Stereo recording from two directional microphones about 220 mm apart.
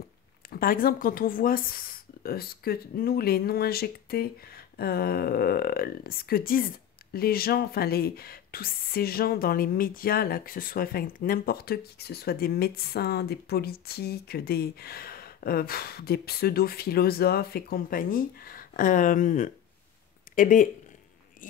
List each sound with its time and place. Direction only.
0.5 s speech: 40° left (ahead or behind)